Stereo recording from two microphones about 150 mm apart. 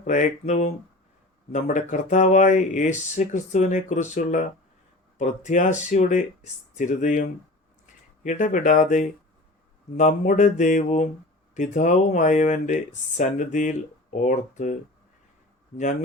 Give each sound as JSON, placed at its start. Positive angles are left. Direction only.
{"t": 0.0, "sound": "speech", "side_deg": 55}